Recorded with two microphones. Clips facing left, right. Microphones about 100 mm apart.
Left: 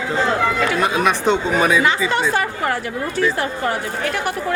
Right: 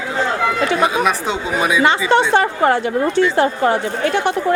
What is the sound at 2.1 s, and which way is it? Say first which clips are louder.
A woman's voice: right 5 dB; 30° right (ahead or behind).